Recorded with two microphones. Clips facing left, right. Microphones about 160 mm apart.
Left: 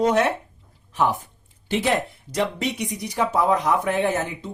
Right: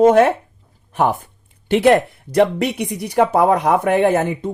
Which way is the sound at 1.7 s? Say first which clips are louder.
Right 9 dB; 60° right (ahead or behind).